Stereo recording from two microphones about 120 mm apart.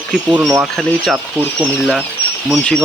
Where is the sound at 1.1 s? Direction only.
15° right (ahead or behind).